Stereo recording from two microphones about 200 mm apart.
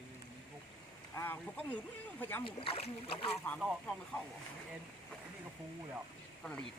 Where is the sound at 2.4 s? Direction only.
25° left (ahead or behind).